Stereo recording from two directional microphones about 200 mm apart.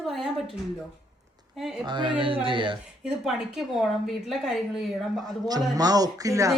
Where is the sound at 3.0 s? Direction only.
Centre (ahead or behind).